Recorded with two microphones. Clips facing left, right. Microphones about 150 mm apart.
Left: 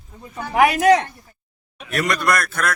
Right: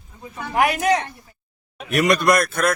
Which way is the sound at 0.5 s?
75° left (ahead or behind).